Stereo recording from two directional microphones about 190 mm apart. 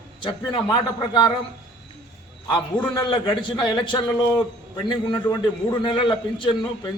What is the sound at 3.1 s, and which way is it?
A man's voice, 25° left (ahead or behind).